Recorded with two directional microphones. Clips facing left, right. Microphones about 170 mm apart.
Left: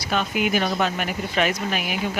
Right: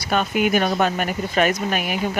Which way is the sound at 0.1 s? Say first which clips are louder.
Right 3 dB; 50° right (ahead or behind).